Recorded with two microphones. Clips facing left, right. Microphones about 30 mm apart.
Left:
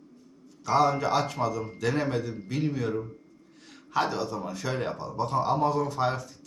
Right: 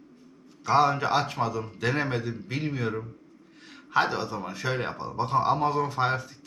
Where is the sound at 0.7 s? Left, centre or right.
Right.